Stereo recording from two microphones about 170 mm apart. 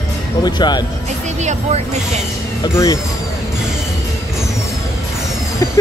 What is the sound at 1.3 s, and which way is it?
Speech, 45° right (ahead or behind).